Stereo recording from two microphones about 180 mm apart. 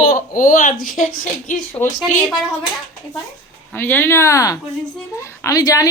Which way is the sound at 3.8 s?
10° left (ahead or behind).